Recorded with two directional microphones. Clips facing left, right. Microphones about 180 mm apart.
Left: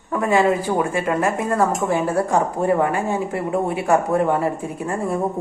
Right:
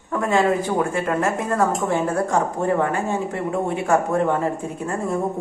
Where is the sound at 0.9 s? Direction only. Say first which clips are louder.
Left 1 dB; centre (ahead or behind).